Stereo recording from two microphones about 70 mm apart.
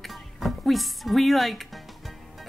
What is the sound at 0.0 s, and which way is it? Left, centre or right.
Music, centre.